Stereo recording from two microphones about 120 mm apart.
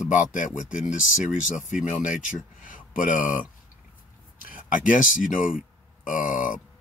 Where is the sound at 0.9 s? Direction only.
90° left.